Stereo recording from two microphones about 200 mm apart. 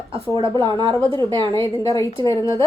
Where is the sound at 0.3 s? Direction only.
25° right (ahead or behind).